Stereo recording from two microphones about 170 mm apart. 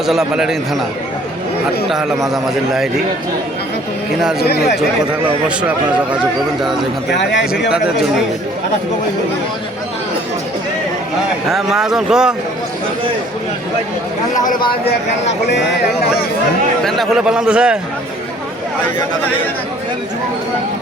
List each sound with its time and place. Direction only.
0.0 s speech: centre (ahead or behind)
1.9 s speech: centre (ahead or behind)
4.2 s speech: centre (ahead or behind)
5.5 s speech: 5° right (ahead or behind)
7.1 s speech: 85° left
11.5 s speech: centre (ahead or behind)
16.8 s speech: centre (ahead or behind)